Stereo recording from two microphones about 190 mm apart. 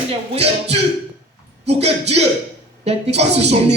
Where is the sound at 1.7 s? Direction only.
35° right (ahead or behind).